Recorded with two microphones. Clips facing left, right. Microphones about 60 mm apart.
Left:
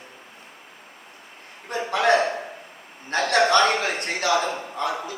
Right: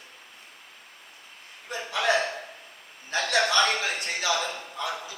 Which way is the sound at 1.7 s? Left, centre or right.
Left.